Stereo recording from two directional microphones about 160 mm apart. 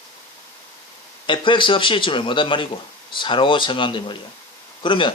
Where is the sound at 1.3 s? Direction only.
30° left (ahead or behind).